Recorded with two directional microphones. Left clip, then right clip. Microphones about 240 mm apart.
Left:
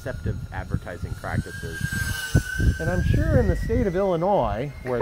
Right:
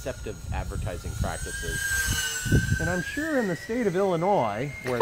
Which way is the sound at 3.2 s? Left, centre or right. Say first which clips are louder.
Left 4 dB; left.